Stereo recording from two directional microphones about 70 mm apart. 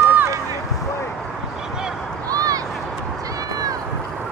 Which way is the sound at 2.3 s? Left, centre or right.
Right.